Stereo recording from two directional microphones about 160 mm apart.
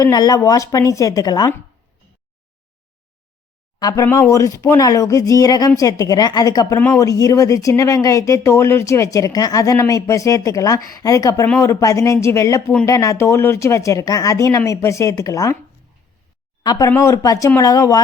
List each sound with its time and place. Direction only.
0.0 s speech: 20° left (ahead or behind)
3.8 s speech: 25° left (ahead or behind)
16.6 s speech: 20° left (ahead or behind)